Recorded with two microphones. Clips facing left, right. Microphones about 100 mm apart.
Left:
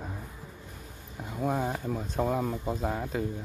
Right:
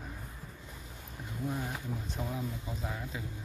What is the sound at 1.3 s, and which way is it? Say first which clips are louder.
Speech: left 8 dB; 65° left (ahead or behind).